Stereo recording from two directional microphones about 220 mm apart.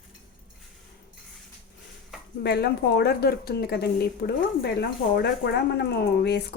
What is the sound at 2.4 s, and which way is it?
A woman's voice, 45° left (ahead or behind).